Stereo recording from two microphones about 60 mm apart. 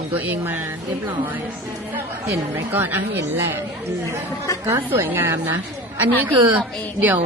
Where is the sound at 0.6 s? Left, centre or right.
Right.